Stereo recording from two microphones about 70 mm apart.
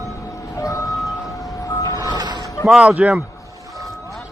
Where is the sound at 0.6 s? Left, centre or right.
Left.